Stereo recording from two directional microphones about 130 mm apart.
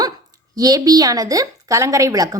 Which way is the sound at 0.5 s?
30° right (ahead or behind).